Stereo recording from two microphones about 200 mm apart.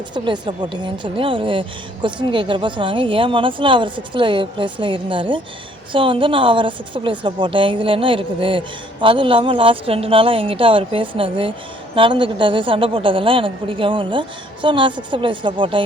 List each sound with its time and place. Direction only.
0.1 s a woman's voice: 25° right (ahead or behind)